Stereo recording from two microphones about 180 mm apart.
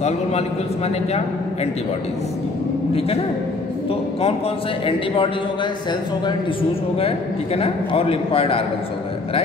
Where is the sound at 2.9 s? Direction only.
35° left (ahead or behind).